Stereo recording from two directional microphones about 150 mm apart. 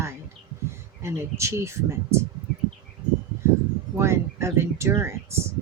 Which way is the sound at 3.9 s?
20° right (ahead or behind).